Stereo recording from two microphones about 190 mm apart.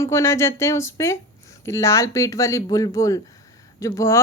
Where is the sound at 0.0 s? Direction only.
15° left (ahead or behind).